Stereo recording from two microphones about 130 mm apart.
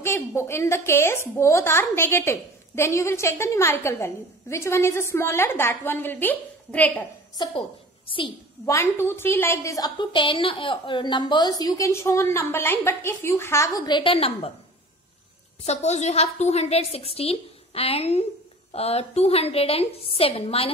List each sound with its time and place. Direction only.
0.0 s a woman's voice: 20° left (ahead or behind)
8.6 s a woman's voice: 20° left (ahead or behind)
13.8 s a woman's voice: 40° left (ahead or behind)
15.6 s a woman's voice: 60° left (ahead or behind)